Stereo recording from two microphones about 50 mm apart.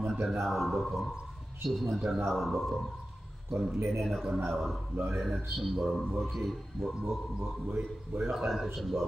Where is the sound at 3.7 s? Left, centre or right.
Right.